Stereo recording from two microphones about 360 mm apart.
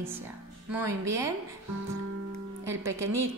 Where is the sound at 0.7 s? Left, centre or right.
Centre.